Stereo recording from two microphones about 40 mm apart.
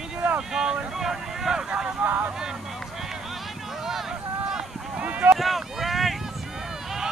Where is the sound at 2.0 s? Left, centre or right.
Right.